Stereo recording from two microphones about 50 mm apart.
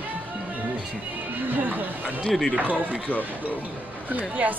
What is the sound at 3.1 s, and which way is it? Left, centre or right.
Speech, left.